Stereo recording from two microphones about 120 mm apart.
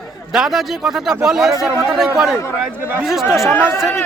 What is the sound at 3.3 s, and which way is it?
Speech, centre (ahead or behind).